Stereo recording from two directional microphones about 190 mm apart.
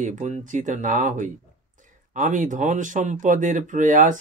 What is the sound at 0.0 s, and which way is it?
Speech, 40° right (ahead or behind).